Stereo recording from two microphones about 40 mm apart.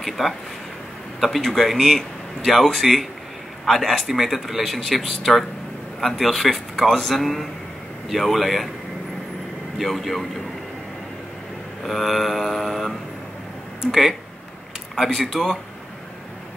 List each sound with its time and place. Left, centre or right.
0.0 s speech: centre
9.8 s speech: centre
11.8 s speech: centre
15.1 s speech: centre